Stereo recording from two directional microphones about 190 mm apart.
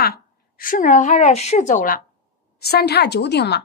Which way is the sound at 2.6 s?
55° left (ahead or behind).